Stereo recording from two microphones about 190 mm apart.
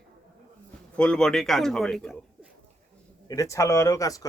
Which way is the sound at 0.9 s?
5° left (ahead or behind).